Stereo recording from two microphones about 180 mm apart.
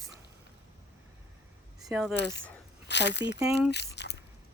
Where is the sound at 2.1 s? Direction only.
75° left (ahead or behind).